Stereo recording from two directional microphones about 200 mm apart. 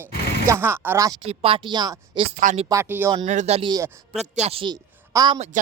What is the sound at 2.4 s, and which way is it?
Speech, 35° right (ahead or behind).